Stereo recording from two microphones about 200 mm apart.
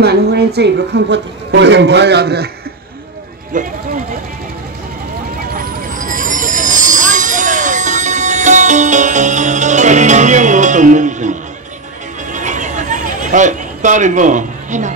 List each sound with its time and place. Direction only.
0.0 s a woman's voice: 55° right (ahead or behind)
3.5 s speech: 40° right (ahead or behind)
5.5 s vehicle: 45° right (ahead or behind)
12.3 s a sound: 40° right (ahead or behind)